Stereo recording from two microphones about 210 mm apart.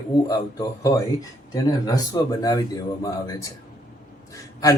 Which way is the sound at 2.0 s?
15° left (ahead or behind).